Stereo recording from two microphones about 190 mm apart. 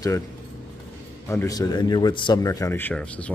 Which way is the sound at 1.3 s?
15° left (ahead or behind).